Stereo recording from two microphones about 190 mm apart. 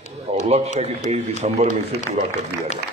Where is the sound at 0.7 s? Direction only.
35° right (ahead or behind).